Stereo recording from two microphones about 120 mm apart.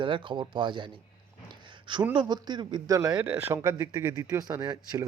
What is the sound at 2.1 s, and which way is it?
Speech, 35° right (ahead or behind).